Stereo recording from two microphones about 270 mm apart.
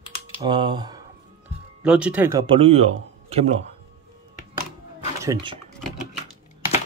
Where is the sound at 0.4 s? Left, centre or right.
Centre.